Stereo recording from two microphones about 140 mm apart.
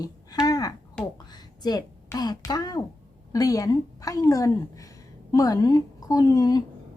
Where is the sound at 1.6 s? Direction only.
30° left (ahead or behind).